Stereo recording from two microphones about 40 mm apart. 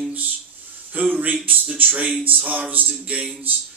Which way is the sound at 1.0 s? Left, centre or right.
Right.